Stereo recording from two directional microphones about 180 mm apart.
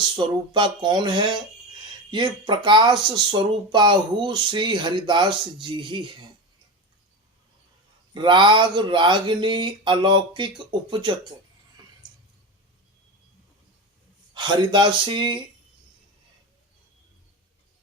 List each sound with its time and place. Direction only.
0.2 s speech: 25° right (ahead or behind)
8.1 s speech: 25° right (ahead or behind)
14.3 s speech: 25° right (ahead or behind)